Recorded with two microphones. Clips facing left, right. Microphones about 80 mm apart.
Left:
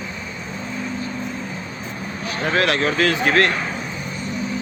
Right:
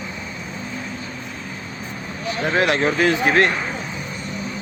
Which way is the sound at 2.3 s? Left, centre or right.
Right.